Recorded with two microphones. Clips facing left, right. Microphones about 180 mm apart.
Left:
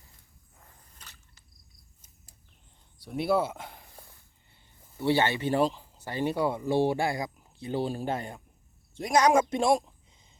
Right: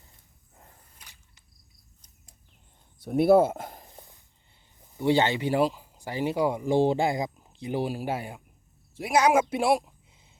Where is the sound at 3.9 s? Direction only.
20° right (ahead or behind).